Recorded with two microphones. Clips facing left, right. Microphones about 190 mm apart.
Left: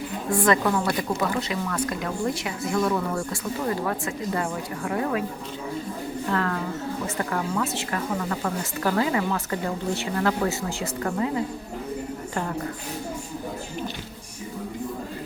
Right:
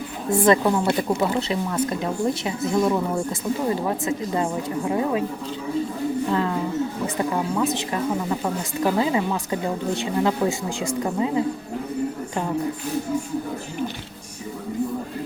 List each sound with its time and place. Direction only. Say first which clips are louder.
0.3 s speech: right 4 dB; 25° right (ahead or behind)
6.3 s speech: right 4 dB; 15° right (ahead or behind)